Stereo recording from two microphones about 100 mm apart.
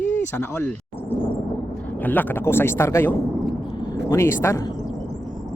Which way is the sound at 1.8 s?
20° left (ahead or behind).